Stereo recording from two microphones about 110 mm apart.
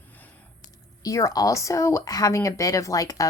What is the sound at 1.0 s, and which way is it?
Speech, 30° left (ahead or behind).